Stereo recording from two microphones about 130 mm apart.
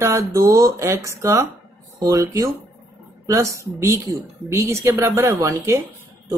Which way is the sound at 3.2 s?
20° right (ahead or behind).